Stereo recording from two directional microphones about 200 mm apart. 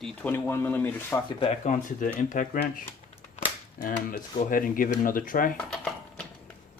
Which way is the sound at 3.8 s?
40° left (ahead or behind).